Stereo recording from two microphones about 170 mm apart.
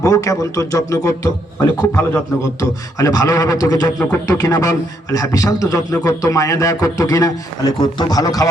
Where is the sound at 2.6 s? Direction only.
20° left (ahead or behind).